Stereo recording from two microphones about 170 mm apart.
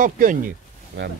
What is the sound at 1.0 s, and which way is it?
Speech, 90° right.